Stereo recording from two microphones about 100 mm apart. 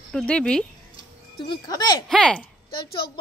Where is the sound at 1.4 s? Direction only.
45° left (ahead or behind).